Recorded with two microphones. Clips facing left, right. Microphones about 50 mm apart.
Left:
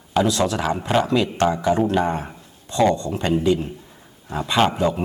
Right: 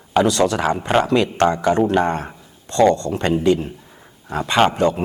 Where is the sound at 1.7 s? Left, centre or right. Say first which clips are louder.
Right 1 dB; centre.